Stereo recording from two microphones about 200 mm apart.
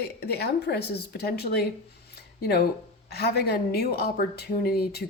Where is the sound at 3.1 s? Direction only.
50° left (ahead or behind).